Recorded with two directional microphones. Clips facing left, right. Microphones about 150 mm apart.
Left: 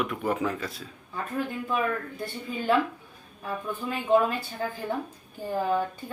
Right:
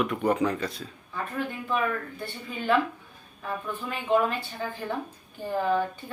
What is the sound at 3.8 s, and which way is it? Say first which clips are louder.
Speech: left 2 dB; 40° left (ahead or behind).